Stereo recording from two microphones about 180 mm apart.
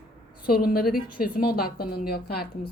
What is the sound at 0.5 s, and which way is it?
A woman's voice, 55° left (ahead or behind).